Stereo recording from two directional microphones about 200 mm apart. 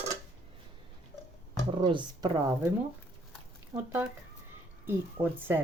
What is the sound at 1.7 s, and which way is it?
Speech, 25° right (ahead or behind).